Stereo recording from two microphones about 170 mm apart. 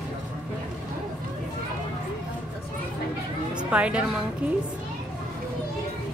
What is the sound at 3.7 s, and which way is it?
Speech, 5° right (ahead or behind).